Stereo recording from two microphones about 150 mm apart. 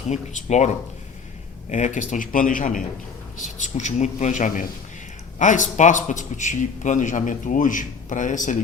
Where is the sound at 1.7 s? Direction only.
55° left (ahead or behind).